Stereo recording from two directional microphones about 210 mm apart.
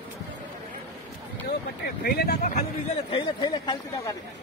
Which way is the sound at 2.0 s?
45° left (ahead or behind).